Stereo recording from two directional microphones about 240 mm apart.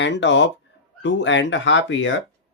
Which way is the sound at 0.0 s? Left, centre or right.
Left.